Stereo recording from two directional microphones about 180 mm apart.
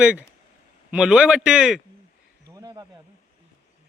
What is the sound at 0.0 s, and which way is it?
Speech, 5° right (ahead or behind).